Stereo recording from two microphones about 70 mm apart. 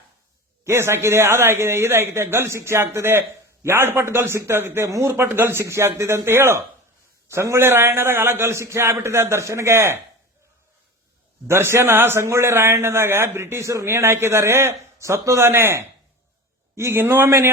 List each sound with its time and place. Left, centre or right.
0.6 s a man's voice: right
4.9 s a man's voice: right
5.1 s a man's voice: right
11.4 s a man's voice: right